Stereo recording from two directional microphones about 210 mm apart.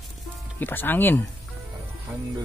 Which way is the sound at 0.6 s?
10° left (ahead or behind).